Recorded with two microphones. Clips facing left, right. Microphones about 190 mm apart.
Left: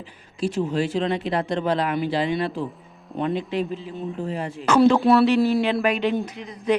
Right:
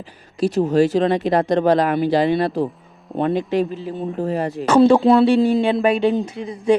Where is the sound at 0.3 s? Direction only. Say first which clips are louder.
Right 7 dB; 40° right (ahead or behind).